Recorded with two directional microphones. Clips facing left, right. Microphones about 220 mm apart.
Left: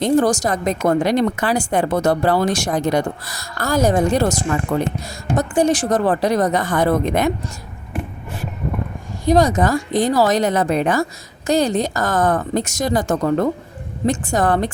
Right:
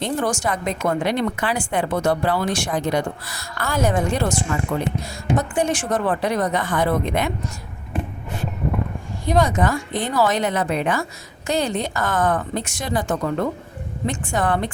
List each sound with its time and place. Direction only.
0.0 s a woman's voice: 40° left (ahead or behind)
9.2 s a woman's voice: 40° left (ahead or behind)